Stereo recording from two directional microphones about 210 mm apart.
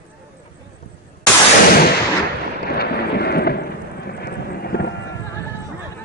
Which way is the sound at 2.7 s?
50° left (ahead or behind).